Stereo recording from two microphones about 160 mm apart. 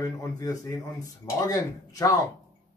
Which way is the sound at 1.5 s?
20° left (ahead or behind).